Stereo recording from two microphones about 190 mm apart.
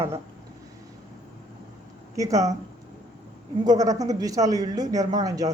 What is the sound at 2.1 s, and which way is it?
Speech, 15° right (ahead or behind).